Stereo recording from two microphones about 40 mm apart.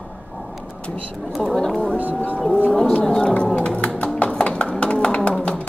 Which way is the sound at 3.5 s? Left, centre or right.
Left.